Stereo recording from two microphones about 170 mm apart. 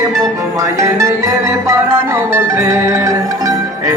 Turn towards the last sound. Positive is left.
turn(degrees=-20)  # may be behind; listen again after turning